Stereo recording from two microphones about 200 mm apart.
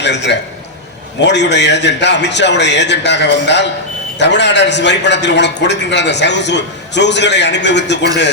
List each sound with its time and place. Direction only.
0.0 s a man's voice: 60° left (ahead or behind)